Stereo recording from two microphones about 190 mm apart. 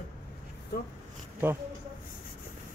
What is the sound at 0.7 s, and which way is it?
Speech, 55° left (ahead or behind).